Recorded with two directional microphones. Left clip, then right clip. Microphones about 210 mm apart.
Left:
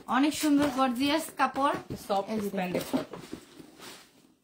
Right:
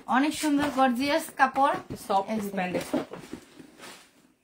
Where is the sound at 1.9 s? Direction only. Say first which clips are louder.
Right 4 dB; 35° right (ahead or behind).